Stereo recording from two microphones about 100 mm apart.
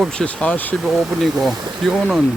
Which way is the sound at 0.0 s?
5° left (ahead or behind).